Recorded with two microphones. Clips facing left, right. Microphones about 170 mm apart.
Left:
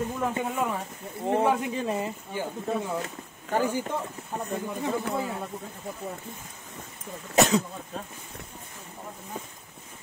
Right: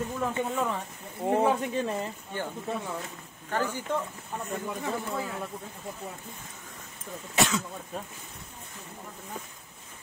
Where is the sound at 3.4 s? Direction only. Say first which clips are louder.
Left 4 dB; 15° left (ahead or behind).